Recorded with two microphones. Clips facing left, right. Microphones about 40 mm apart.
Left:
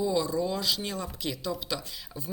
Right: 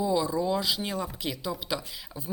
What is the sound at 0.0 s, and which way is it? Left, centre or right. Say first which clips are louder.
A woman's voice: right 1 dB; centre.